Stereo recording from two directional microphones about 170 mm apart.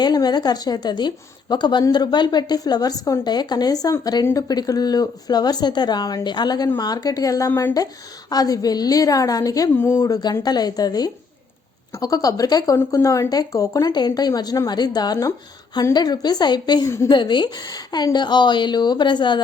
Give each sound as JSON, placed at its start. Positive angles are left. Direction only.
{"t": 0.0, "sound": "a woman's voice", "side_deg": 25}